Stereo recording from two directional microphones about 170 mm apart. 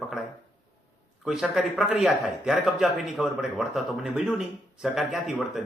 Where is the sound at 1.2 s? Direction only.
5° right (ahead or behind).